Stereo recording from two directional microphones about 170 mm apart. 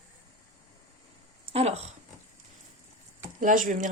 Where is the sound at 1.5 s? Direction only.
40° right (ahead or behind).